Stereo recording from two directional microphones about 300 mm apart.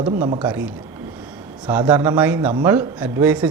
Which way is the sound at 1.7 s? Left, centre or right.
Centre.